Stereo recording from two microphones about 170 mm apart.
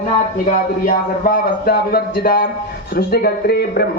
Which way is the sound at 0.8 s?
60° left (ahead or behind).